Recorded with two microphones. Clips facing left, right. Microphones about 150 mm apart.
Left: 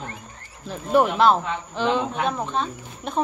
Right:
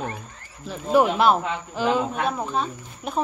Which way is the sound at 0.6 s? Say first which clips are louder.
Even; centre (ahead or behind).